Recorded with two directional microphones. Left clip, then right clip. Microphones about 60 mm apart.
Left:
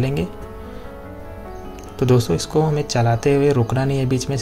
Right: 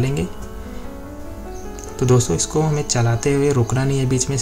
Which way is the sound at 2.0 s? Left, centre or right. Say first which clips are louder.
Even; left.